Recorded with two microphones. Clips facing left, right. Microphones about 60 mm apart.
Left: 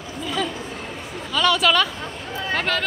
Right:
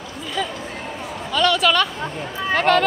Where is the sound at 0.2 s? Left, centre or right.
Centre.